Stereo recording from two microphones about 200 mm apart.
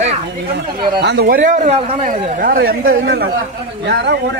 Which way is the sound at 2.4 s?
45° right (ahead or behind).